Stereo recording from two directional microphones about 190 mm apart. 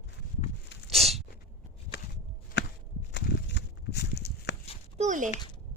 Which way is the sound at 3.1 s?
65° left (ahead or behind).